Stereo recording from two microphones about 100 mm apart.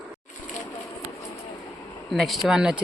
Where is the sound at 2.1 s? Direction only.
Centre (ahead or behind).